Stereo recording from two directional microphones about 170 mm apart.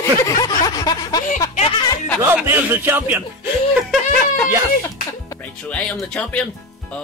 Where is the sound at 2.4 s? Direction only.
10° right (ahead or behind).